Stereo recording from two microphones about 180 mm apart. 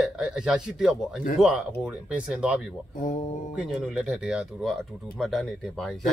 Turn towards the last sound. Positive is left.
turn(degrees=0)  # may be behind; listen again after turning